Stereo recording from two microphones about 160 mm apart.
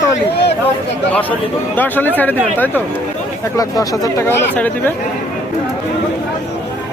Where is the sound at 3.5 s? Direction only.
20° left (ahead or behind).